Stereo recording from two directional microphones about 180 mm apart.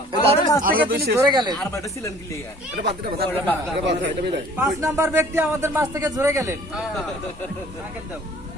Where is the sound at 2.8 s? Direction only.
60° right (ahead or behind).